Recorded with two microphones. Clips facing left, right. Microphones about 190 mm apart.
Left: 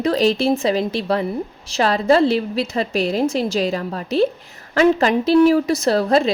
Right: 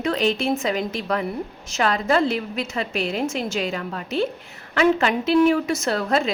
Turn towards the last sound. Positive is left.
turn(degrees=35)  # may be behind; listen again after turning